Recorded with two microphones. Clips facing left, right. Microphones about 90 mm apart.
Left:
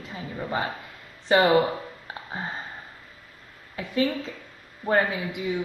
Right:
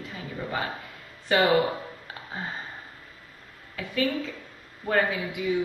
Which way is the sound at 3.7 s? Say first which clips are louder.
Left 2 dB; 25° left (ahead or behind).